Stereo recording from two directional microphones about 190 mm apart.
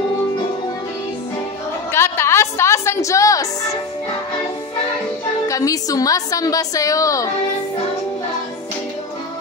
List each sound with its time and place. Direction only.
1.9 s a woman's voice: 15° left (ahead or behind)
5.5 s a woman's voice: 20° left (ahead or behind)